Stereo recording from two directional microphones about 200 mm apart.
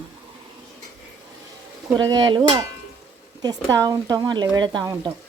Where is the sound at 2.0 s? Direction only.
20° right (ahead or behind).